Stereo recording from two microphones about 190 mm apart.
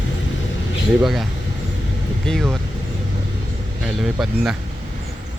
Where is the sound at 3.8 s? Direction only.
Centre (ahead or behind).